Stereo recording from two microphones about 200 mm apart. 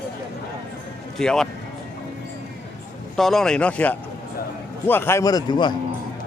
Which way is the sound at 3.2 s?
Centre (ahead or behind).